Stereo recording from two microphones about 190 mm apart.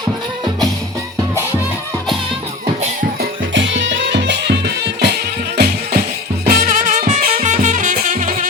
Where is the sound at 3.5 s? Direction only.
75° right (ahead or behind).